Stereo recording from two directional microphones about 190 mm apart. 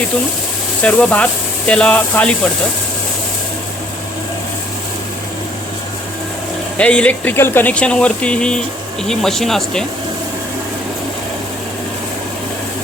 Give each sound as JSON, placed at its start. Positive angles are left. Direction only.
{"t": 0.8, "sound": "speech", "side_deg": 5}
{"t": 6.7, "sound": "speech", "side_deg": 5}